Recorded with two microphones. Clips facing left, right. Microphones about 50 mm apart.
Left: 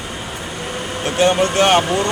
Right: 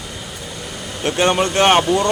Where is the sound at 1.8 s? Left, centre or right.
Left.